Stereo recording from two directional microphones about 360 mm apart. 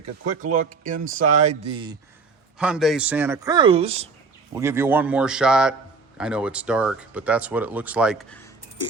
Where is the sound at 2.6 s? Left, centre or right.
Centre.